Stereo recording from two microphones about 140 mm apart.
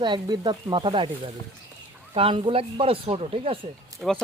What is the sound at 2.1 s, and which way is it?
Speech, 40° right (ahead or behind).